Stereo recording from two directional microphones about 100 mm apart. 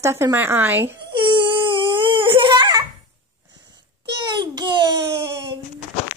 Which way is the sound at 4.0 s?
45° right (ahead or behind).